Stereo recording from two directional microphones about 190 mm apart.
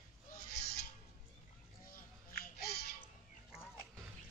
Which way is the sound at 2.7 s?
55° left (ahead or behind).